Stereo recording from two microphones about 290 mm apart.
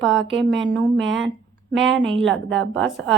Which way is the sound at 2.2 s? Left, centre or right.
Right.